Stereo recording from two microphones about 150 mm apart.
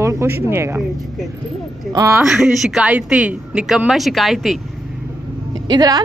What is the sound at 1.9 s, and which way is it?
Speech, 20° right (ahead or behind).